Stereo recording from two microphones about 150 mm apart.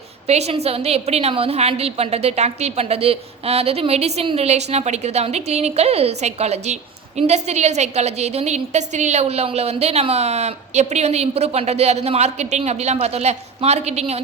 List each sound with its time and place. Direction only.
0.3 s a woman's voice: 45° right (ahead or behind)